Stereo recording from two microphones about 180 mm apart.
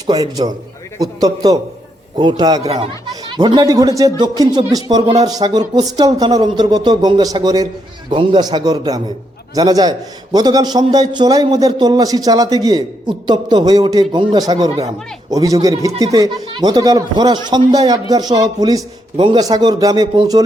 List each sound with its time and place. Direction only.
0.1 s a man's voice: 20° right (ahead or behind)
2.6 s a man's voice: 35° right (ahead or behind)